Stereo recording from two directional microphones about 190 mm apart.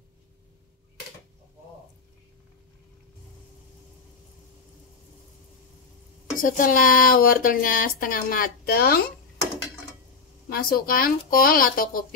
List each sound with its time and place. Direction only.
6.4 s speech: 45° left (ahead or behind)
10.5 s speech: 50° left (ahead or behind)